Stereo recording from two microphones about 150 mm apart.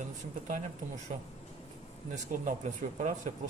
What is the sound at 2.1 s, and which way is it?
Speech, 55° right (ahead or behind).